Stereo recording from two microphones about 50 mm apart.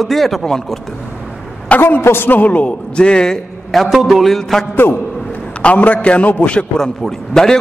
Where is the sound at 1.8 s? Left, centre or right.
Left.